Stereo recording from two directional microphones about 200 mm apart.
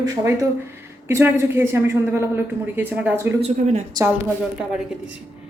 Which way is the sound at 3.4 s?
35° right (ahead or behind).